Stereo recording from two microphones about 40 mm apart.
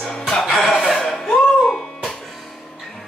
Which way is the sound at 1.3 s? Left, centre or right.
Centre.